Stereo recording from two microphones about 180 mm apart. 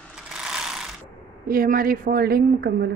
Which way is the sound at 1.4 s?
55° right (ahead or behind).